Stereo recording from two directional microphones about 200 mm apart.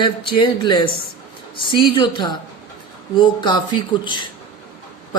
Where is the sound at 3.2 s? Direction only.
20° left (ahead or behind).